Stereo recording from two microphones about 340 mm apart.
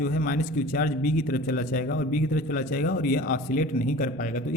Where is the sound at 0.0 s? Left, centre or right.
Left.